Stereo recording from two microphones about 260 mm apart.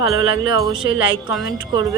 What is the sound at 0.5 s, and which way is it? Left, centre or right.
Speech, centre.